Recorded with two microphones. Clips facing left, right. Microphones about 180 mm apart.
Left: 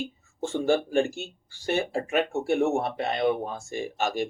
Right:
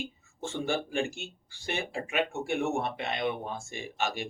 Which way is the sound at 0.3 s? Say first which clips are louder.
Left 7 dB; 45° left (ahead or behind).